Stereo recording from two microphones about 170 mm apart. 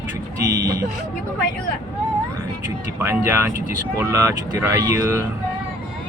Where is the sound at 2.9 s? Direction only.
15° right (ahead or behind).